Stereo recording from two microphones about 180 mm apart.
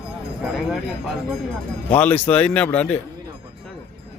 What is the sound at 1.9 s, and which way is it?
A man's voice, 10° left (ahead or behind).